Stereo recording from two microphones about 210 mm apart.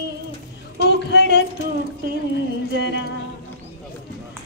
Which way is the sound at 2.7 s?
55° left (ahead or behind).